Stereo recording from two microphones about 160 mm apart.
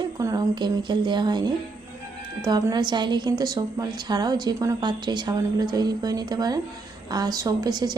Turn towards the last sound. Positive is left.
turn(degrees=-25)  # may be behind; listen again after turning